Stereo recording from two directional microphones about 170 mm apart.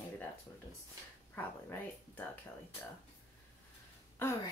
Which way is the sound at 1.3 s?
15° left (ahead or behind).